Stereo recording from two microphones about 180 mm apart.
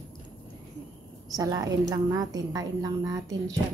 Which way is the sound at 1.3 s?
20° right (ahead or behind).